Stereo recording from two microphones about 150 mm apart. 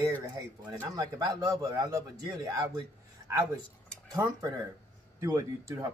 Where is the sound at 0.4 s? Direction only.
20° right (ahead or behind).